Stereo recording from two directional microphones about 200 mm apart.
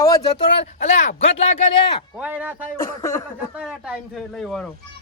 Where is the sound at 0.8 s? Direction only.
35° left (ahead or behind).